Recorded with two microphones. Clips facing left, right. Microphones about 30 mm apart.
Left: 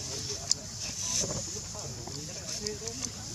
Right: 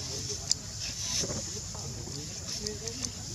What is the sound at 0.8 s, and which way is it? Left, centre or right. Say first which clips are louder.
Vehicle: even; centre.